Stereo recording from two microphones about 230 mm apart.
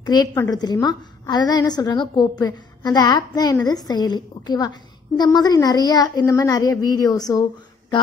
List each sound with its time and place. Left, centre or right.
0.0 s a woman's voice: centre